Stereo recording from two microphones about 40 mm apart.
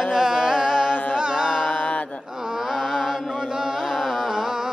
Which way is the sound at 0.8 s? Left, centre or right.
Left.